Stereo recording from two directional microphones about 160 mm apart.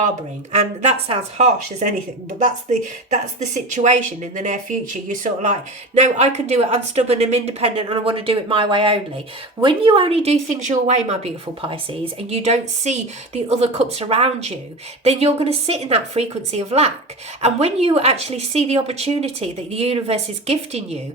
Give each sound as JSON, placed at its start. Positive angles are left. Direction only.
{"t": 0.5, "sound": "speech", "side_deg": -45}
{"t": 3.1, "sound": "a woman's voice", "side_deg": -50}